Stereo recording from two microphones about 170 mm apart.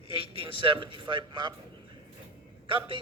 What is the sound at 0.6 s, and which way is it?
Speech, 30° right (ahead or behind).